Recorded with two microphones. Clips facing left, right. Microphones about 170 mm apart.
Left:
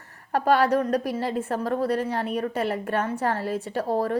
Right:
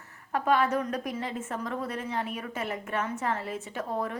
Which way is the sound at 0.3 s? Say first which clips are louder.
Left 5 dB; 70° left (ahead or behind).